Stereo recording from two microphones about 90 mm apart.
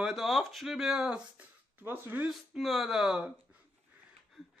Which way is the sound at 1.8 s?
20° right (ahead or behind).